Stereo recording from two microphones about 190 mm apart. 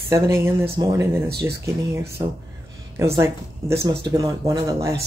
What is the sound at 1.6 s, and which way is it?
Speech, 15° right (ahead or behind).